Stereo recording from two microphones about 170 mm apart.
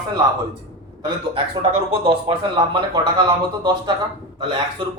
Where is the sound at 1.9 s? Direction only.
35° right (ahead or behind).